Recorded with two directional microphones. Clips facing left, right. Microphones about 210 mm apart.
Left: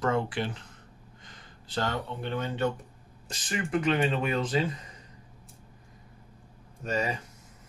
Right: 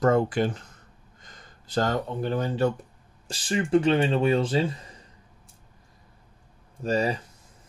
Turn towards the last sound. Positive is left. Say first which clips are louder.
# right 5 dB
turn(degrees=-35)  # may be behind; listen again after turning